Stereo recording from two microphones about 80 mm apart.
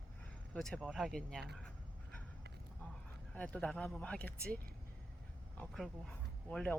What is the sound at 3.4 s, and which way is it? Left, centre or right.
Speech, centre.